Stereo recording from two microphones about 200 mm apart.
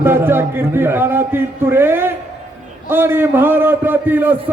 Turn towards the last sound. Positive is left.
turn(degrees=-10)  # may be behind; listen again after turning